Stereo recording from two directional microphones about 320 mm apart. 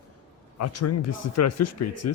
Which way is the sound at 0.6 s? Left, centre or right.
Left.